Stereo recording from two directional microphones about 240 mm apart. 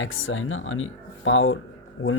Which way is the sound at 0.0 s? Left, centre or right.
Left.